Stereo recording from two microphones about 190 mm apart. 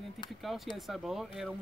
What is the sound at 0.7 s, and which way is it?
Speech, centre (ahead or behind).